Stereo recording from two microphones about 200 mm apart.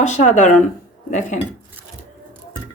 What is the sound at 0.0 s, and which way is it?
Speech, 35° left (ahead or behind).